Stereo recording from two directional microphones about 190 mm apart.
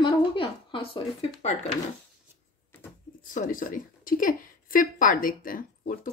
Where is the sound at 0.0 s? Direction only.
25° left (ahead or behind).